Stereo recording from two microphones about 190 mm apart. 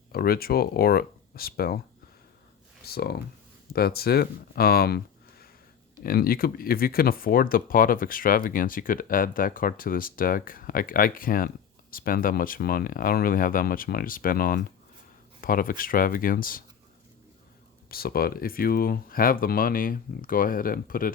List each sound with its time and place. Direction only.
0.1 s speech: 50° left (ahead or behind)
2.8 s speech: 55° left (ahead or behind)
17.9 s speech: 55° left (ahead or behind)